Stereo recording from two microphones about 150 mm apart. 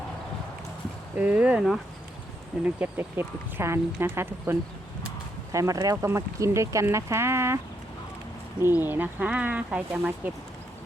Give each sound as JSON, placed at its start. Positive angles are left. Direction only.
{"t": 1.1, "sound": "speech", "side_deg": -10}
{"t": 8.8, "sound": "speech", "side_deg": -15}